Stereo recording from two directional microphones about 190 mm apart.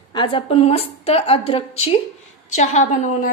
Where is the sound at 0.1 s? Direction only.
25° left (ahead or behind).